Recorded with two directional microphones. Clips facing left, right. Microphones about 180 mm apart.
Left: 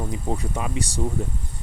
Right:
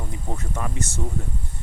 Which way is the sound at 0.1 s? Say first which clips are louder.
Left 4 dB; 15° left (ahead or behind).